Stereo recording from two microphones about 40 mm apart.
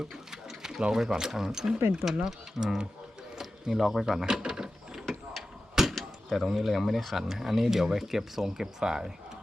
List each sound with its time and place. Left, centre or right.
0.6 s speech: centre
3.3 s a sound: centre
4.0 s speech: centre
4.9 s mechanisms: centre
5.8 s door: centre
6.3 s speech: centre